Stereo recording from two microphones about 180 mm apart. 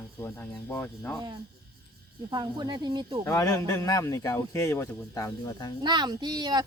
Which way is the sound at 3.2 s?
20° left (ahead or behind).